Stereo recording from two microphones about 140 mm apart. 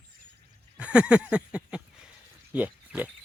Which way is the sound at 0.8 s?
10° right (ahead or behind).